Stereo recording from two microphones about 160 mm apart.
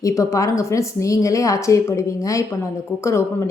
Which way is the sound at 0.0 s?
20° left (ahead or behind).